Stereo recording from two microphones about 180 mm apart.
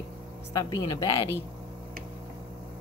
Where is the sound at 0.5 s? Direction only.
20° left (ahead or behind).